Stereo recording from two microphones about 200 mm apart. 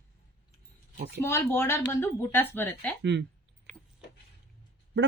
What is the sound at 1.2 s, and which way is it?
A woman's voice, 10° left (ahead or behind).